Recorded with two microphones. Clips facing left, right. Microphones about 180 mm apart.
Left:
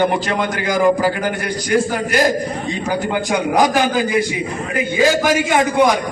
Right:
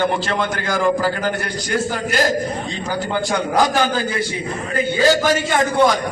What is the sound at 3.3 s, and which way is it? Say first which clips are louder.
A man's voice: left 3 dB; 15° left (ahead or behind).